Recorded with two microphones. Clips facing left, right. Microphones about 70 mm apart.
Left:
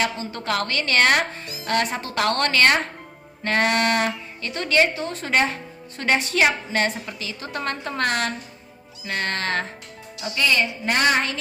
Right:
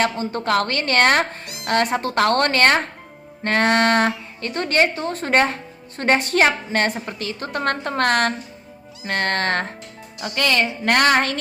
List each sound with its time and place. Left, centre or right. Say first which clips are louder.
0.0 s a woman's voice: right 4 dB; right
1.5 s music: right 3 dB; right
1.7 s a woman's voice: right 4 dB; right